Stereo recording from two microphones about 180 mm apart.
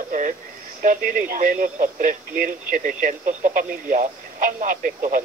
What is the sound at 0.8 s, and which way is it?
Speech, 50° right (ahead or behind).